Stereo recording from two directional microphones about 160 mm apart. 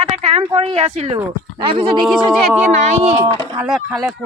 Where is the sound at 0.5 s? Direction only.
40° right (ahead or behind).